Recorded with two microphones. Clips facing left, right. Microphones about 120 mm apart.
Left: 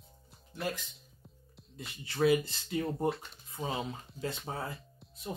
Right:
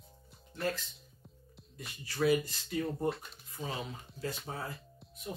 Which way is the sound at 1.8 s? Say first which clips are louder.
Left 3 dB; 25° left (ahead or behind).